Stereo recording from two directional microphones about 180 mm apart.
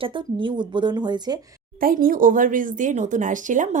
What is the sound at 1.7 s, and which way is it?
Speech, 50° right (ahead or behind).